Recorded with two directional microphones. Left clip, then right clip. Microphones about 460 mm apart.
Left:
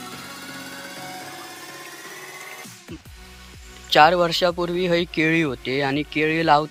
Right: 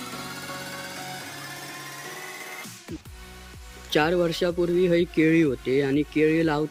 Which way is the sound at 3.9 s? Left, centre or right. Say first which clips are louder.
Left 8 dB; centre.